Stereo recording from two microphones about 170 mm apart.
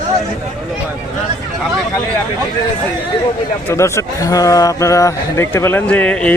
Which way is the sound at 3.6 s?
15° left (ahead or behind).